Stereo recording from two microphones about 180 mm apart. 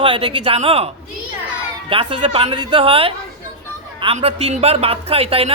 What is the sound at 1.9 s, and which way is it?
A man's voice, 30° right (ahead or behind).